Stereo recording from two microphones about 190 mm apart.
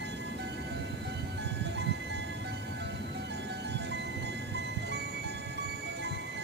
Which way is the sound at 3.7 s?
60° right (ahead or behind).